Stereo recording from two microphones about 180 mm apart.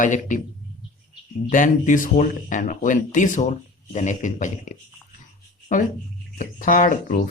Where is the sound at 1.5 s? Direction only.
45° left (ahead or behind).